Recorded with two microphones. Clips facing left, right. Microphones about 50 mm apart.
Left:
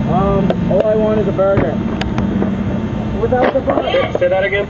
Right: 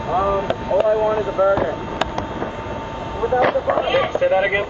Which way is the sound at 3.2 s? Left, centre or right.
Left.